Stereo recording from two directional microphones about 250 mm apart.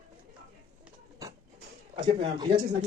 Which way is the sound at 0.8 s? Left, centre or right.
Centre.